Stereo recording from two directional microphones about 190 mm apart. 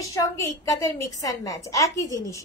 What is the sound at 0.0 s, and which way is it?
A woman's voice, 15° left (ahead or behind).